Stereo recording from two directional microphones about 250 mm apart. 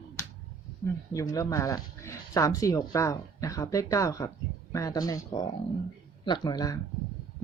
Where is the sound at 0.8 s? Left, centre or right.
Centre.